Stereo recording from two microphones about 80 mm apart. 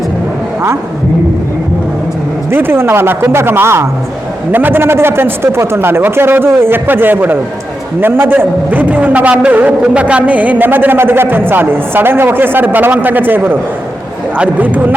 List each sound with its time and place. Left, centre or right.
2.5 s a man's voice: right